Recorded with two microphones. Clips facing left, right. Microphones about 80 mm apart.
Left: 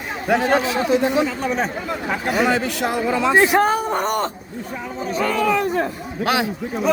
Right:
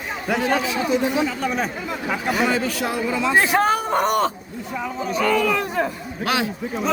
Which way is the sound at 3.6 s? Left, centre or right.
Centre.